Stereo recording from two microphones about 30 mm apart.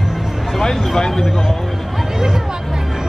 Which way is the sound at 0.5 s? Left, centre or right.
Centre.